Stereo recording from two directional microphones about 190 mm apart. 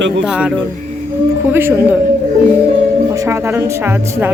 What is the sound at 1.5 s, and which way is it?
Speech, 10° right (ahead or behind).